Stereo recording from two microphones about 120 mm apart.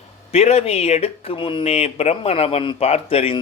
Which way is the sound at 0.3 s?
60° left (ahead or behind).